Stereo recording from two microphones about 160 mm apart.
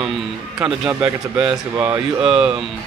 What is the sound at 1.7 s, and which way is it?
Speech, 20° right (ahead or behind).